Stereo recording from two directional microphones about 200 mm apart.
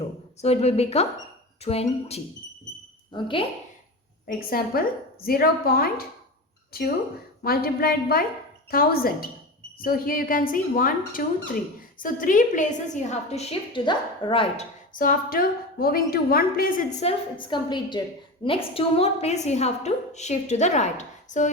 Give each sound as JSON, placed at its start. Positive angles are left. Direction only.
{"t": 0.4, "sound": "a woman's voice", "side_deg": 30}
{"t": 4.3, "sound": "speech", "side_deg": 45}
{"t": 17.0, "sound": "a woman's voice", "side_deg": 25}